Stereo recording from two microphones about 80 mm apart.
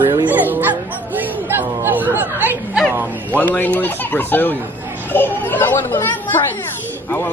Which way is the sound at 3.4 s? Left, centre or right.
Left.